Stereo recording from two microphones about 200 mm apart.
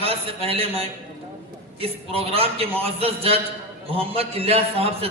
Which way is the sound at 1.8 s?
30° right (ahead or behind).